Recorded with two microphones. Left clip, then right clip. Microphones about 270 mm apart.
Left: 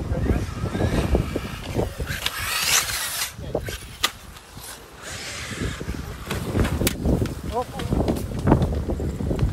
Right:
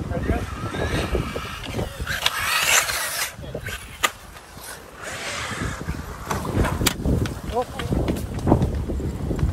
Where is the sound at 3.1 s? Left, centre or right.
Centre.